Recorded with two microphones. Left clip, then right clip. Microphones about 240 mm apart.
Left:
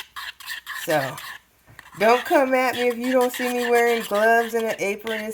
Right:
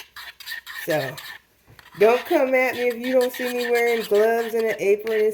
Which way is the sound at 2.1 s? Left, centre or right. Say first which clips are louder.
Left 1 dB; left.